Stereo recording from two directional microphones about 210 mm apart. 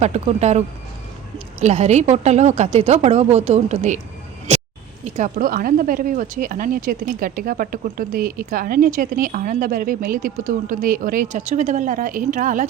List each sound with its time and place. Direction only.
0.0 s speech: 30° right (ahead or behind)
4.5 s a sound: 30° right (ahead or behind)
5.0 s speech: 35° right (ahead or behind)